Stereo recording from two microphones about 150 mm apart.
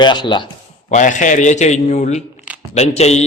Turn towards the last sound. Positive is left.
turn(degrees=45)  # may be behind; listen again after turning